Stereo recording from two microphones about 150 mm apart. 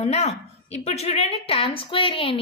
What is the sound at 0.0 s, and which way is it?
A woman's voice, 45° left (ahead or behind).